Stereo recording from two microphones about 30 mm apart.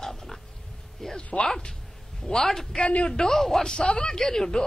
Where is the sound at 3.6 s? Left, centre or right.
Left.